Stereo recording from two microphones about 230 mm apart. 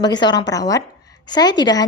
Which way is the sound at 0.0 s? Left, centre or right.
Centre.